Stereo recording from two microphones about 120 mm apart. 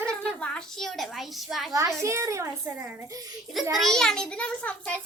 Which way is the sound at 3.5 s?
Centre (ahead or behind).